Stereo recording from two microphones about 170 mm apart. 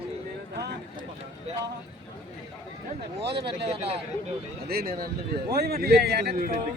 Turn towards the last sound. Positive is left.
turn(degrees=-70)  # may be behind; listen again after turning